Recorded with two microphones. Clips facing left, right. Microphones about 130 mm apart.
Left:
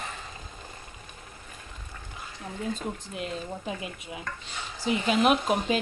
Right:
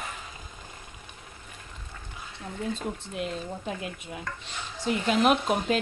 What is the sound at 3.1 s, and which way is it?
Speech, centre (ahead or behind).